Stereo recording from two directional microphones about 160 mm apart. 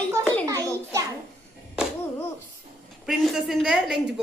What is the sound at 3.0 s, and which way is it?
Speech, centre (ahead or behind).